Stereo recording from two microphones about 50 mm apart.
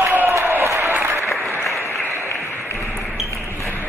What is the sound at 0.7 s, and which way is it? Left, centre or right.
Applause, right.